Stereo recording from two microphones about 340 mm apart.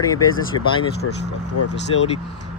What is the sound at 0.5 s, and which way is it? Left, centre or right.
Speech, left.